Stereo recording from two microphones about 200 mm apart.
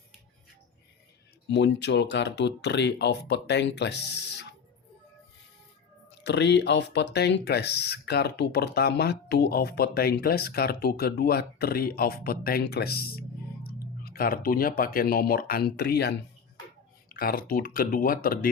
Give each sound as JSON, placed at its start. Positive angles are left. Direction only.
{"t": 1.5, "sound": "speech", "side_deg": 60}
{"t": 6.2, "sound": "speech", "side_deg": 60}